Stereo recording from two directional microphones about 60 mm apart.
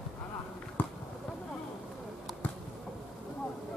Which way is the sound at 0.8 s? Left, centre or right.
Left.